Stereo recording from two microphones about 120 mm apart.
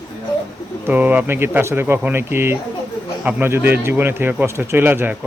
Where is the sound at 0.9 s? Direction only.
15° right (ahead or behind).